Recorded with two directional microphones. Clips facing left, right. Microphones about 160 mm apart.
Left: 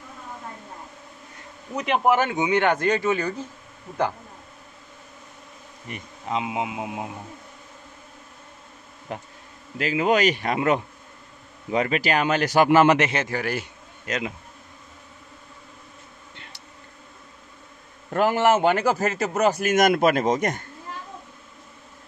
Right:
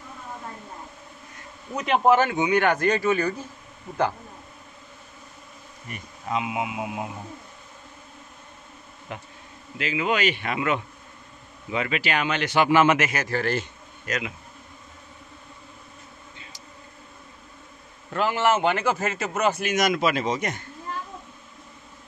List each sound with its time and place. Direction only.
1.8 s speech: 15° left (ahead or behind)
5.9 s speech: 20° left (ahead or behind)
9.1 s speech: 35° left (ahead or behind)
13.3 s a man's voice: 10° left (ahead or behind)
14.1 s speech: 25° left (ahead or behind)
16.3 s insect: 70° left (ahead or behind)
18.1 s a man's voice: 45° left (ahead or behind)